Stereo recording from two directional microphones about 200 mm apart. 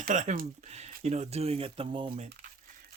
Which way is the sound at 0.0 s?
40° right (ahead or behind).